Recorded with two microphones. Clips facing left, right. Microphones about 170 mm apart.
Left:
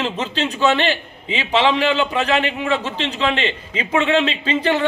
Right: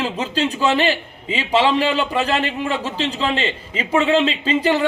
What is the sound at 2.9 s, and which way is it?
Speech, 40° right (ahead or behind).